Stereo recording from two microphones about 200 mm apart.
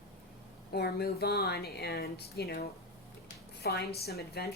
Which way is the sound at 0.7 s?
50° left (ahead or behind).